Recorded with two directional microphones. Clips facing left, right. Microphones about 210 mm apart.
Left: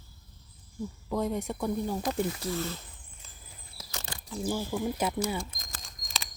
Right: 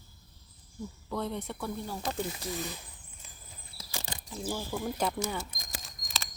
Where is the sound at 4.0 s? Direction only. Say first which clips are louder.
Left 1 dB; 20° right (ahead or behind).